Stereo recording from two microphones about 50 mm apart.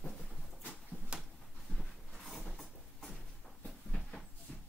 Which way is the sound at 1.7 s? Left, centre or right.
Left.